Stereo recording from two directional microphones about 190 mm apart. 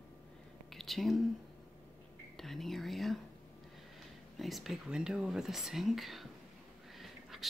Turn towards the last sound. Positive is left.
turn(degrees=0)  # may be behind; listen again after turning